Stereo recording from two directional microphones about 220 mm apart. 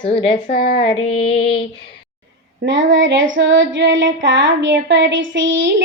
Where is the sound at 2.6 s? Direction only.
55° right (ahead or behind).